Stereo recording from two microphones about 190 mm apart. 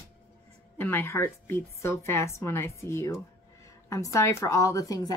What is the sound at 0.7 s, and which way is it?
A woman's voice, 10° left (ahead or behind).